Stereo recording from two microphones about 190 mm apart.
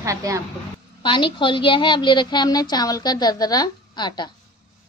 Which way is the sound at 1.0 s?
25° left (ahead or behind).